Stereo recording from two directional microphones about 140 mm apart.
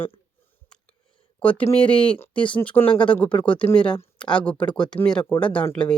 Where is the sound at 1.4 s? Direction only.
10° left (ahead or behind).